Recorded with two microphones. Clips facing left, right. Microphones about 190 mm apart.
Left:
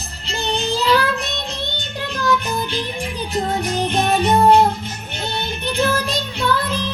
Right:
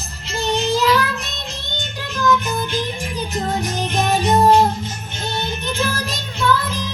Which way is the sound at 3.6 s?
55° left (ahead or behind).